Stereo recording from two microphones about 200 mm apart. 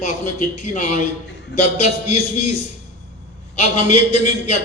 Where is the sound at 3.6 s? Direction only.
35° left (ahead or behind).